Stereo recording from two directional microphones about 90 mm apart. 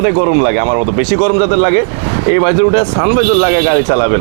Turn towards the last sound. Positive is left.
turn(degrees=-25)  # may be behind; listen again after turning